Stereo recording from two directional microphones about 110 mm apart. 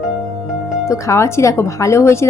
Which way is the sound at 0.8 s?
25° left (ahead or behind).